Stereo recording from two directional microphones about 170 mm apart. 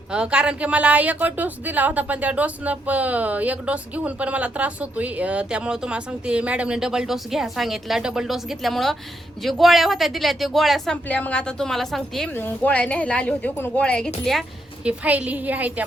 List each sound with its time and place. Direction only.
0.1 s speech: 5° right (ahead or behind)
14.8 s speech: 10° right (ahead or behind)